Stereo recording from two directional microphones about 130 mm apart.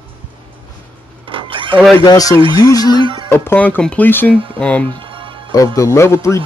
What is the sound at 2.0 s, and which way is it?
Speech, 30° left (ahead or behind).